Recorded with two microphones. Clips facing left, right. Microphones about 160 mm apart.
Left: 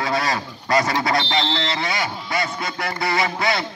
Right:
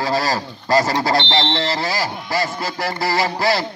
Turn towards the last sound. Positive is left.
turn(degrees=-30)  # may be behind; listen again after turning